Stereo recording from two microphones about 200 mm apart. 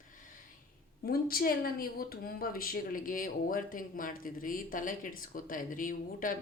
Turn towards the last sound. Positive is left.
turn(degrees=45)  # may be behind; listen again after turning